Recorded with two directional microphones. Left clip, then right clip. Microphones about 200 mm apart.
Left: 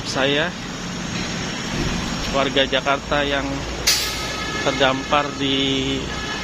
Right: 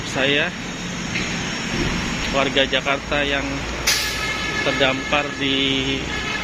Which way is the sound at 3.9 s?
55° left (ahead or behind).